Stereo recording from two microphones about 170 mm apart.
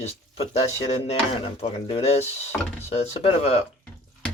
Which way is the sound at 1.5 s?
35° left (ahead or behind).